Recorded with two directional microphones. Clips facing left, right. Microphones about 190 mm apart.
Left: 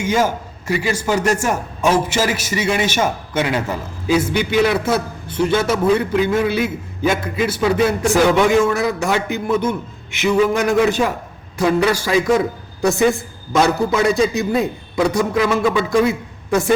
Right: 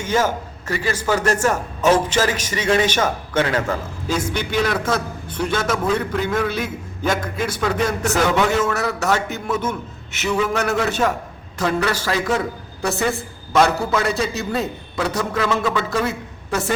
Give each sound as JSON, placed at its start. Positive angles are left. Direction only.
{"t": 0.0, "sound": "a man's voice", "side_deg": 10}